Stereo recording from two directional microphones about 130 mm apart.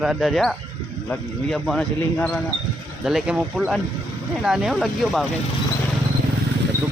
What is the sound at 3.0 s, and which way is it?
Speech, 5° right (ahead or behind).